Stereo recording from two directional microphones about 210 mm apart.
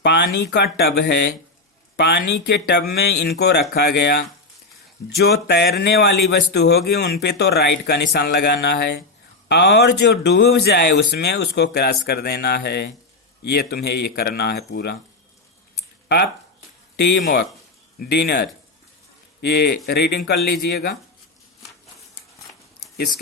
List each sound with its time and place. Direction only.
0.0 s a man's voice: 55° left (ahead or behind)
16.0 s a man's voice: 50° left (ahead or behind)